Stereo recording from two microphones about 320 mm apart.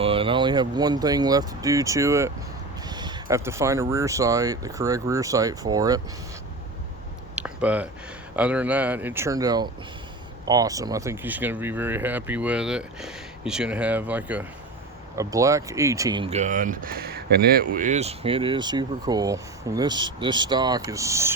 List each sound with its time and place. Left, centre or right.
0.0 s speech: centre
7.3 s a sound: centre
8.4 s speech: centre